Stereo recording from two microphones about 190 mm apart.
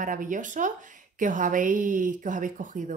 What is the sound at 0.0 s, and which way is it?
Speech, 45° right (ahead or behind).